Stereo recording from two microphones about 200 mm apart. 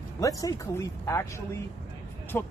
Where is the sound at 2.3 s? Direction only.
10° left (ahead or behind).